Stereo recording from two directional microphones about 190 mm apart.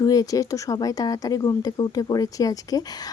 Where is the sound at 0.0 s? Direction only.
20° left (ahead or behind).